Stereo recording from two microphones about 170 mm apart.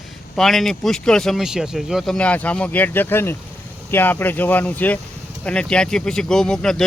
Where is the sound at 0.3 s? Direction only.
Centre (ahead or behind).